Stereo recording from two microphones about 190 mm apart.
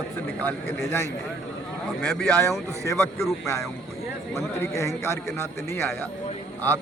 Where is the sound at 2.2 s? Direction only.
5° left (ahead or behind).